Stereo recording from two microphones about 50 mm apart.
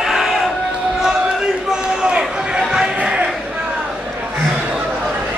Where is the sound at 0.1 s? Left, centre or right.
Centre.